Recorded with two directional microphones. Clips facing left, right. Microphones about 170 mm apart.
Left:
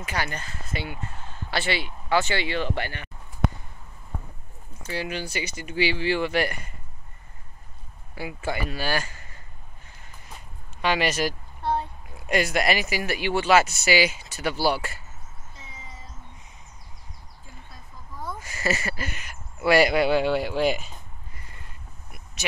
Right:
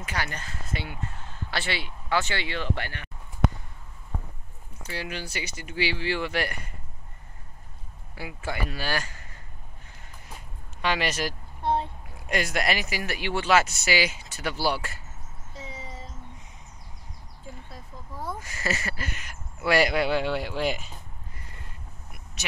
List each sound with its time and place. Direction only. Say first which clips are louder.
0.0 s speech: left 3 dB; 5° left (ahead or behind)
4.9 s speech: left 4 dB; 10° left (ahead or behind)
8.6 s speech: left 3 dB; 5° left (ahead or behind)
10.8 s speech: left 3 dB; 5° left (ahead or behind)
11.6 s a sound: right 1 dB; 25° right (ahead or behind)
12.3 s speech: left 4 dB; 5° left (ahead or behind)
18.4 s speech: left 7 dB; 5° left (ahead or behind)